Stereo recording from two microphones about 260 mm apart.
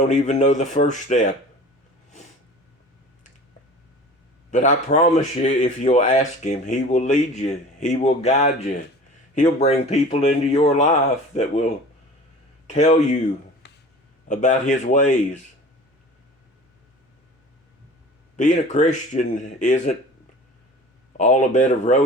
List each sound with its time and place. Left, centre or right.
0.0 s speech: left
4.5 s speech: left
12.6 s speech: left
13.6 s a sound: left
14.3 s speech: left
18.3 s speech: left
21.2 s speech: left